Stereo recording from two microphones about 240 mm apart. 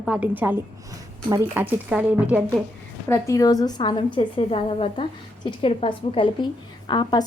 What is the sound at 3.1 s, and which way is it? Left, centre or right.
A woman's voice, centre.